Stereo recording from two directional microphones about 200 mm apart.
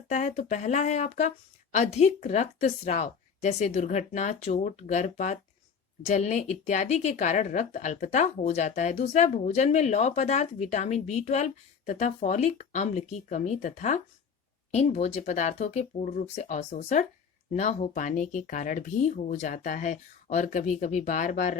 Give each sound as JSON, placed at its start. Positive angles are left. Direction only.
{"t": 0.1, "sound": "a woman's voice", "side_deg": 35}